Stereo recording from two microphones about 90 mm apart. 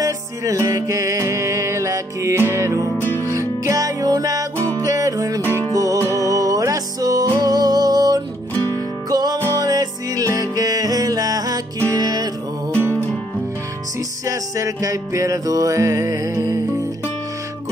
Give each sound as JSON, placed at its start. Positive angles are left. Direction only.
{"t": 0.0, "sound": "music", "side_deg": -40}
{"t": 14.2, "sound": "music", "side_deg": -40}